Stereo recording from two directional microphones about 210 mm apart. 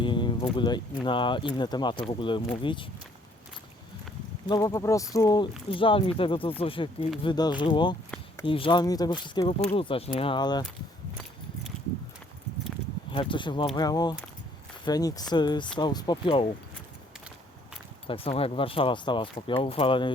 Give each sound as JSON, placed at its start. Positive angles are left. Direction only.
{"t": 0.0, "sound": "speech", "side_deg": 20}
{"t": 4.4, "sound": "speech", "side_deg": 20}
{"t": 13.1, "sound": "speech", "side_deg": 25}
{"t": 18.1, "sound": "speech", "side_deg": 25}